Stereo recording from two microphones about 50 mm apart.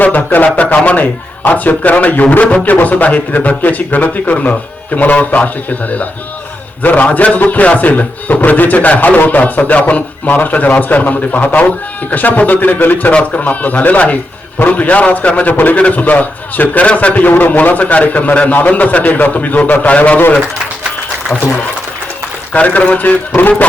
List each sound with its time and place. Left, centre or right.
0.0 s a man's voice: left
20.1 s a man's voice: left
22.5 s a man's voice: left